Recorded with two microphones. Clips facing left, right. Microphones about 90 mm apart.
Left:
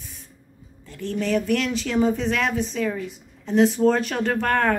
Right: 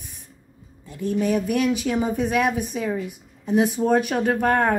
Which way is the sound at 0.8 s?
15° right (ahead or behind).